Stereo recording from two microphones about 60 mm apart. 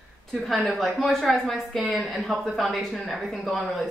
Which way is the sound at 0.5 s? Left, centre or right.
Centre.